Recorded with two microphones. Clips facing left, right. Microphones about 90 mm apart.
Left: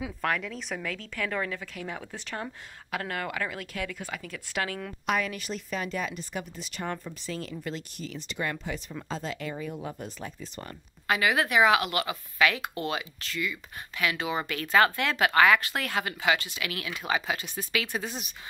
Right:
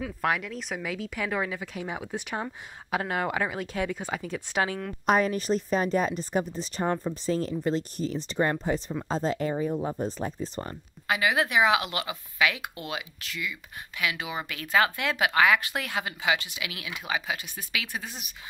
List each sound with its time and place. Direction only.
0.2 s speech: 5° right (ahead or behind); by 4.7 s 20° right (ahead or behind)
5.0 s speech: 35° right (ahead or behind)
11.1 s speech: 15° right (ahead or behind)